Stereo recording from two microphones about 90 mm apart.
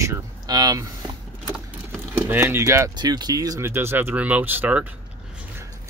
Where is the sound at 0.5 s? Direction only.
45° right (ahead or behind).